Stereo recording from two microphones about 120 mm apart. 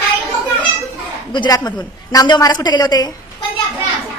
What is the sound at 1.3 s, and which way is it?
A woman's voice, 35° left (ahead or behind).